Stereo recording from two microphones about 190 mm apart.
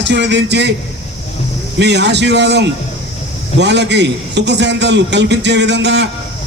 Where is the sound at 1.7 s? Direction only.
65° right (ahead or behind).